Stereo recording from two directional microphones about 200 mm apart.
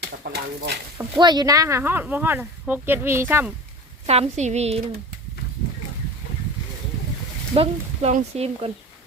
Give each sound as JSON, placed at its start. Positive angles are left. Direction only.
{"t": 0.3, "sound": "speech", "side_deg": -55}
{"t": 1.2, "sound": "speech", "side_deg": -20}
{"t": 4.0, "sound": "speech", "side_deg": -30}
{"t": 7.5, "sound": "speech", "side_deg": -30}